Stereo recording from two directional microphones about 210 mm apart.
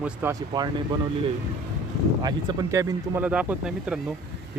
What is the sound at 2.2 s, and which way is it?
Speech, 15° right (ahead or behind).